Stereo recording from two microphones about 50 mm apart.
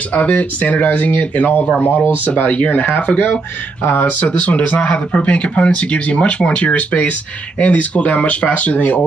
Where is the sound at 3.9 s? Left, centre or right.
Left.